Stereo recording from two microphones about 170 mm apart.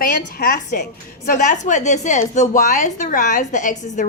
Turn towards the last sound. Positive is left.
turn(degrees=50)  # may be behind; listen again after turning